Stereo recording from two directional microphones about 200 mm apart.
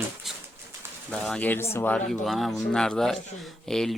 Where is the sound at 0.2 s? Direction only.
Centre (ahead or behind).